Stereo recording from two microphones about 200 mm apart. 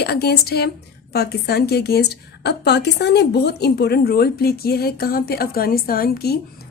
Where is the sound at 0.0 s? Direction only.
55° left (ahead or behind).